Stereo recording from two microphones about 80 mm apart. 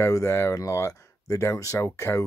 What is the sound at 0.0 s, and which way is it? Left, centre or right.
Speech, left.